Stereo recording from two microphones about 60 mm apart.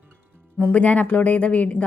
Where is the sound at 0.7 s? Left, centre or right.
Left.